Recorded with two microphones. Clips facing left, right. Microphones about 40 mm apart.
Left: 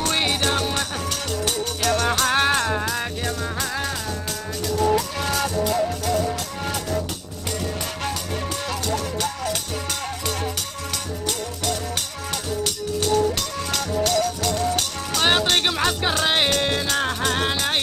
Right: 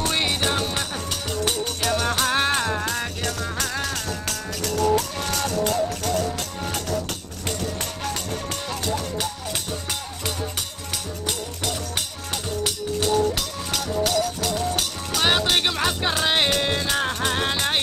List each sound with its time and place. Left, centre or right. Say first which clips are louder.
0.0 s music: left 1 dB; centre
8.8 s music: left 1 dB; centre
11.2 s music: left 2 dB; centre